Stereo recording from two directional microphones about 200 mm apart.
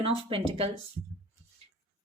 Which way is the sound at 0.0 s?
25° right (ahead or behind).